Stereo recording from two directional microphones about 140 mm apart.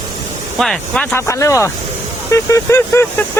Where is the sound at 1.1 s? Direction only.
20° left (ahead or behind).